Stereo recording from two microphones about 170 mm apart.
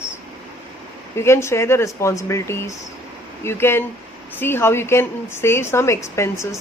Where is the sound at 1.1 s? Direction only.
15° left (ahead or behind).